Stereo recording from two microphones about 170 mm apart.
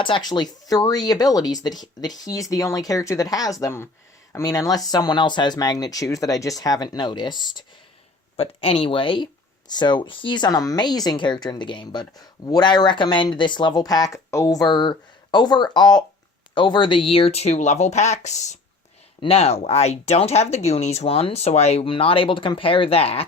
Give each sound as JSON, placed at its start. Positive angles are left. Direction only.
{"t": 0.0, "sound": "speech", "side_deg": 25}